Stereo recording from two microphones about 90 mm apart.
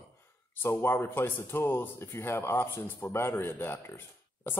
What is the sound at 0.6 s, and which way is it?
Speech, 25° left (ahead or behind).